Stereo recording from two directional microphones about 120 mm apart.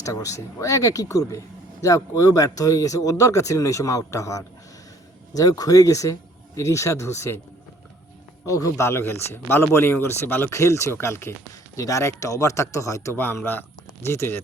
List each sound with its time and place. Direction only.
0.0 s a man's voice: 25° left (ahead or behind)
8.4 s a man's voice: 25° left (ahead or behind)